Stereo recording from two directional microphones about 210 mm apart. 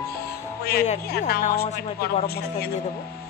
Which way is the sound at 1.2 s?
40° left (ahead or behind).